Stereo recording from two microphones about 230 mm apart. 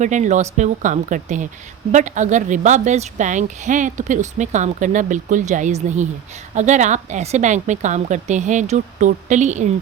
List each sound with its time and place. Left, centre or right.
0.0 s a woman's voice: right